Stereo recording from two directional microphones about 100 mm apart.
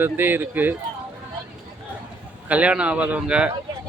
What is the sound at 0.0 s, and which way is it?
Speech, 20° right (ahead or behind).